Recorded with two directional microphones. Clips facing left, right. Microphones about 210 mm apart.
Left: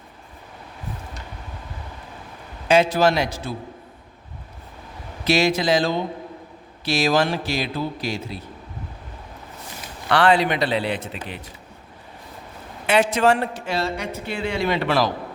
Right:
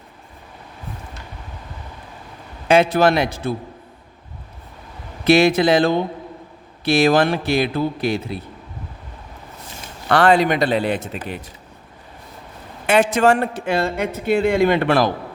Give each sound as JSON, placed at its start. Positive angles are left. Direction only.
{"t": 2.6, "sound": "a man's voice", "side_deg": -60}
{"t": 5.2, "sound": "a man's voice", "side_deg": -55}
{"t": 10.1, "sound": "a man's voice", "side_deg": -45}
{"t": 12.9, "sound": "a man's voice", "side_deg": -50}